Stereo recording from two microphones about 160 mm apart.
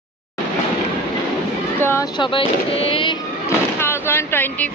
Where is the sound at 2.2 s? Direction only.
35° left (ahead or behind).